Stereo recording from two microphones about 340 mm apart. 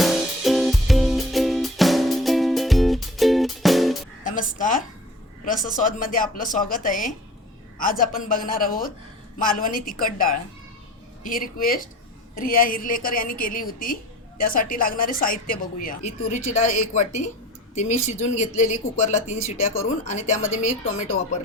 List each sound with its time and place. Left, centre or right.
0.0 s music: centre
4.2 s music: left
5.5 s a woman's voice: left